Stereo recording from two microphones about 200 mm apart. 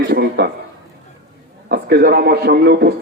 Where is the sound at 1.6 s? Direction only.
55° right (ahead or behind).